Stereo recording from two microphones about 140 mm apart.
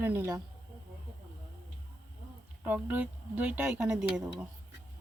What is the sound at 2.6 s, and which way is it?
Speech, 15° right (ahead or behind).